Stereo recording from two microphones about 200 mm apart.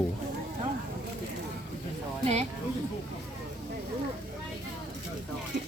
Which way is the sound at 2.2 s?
35° right (ahead or behind).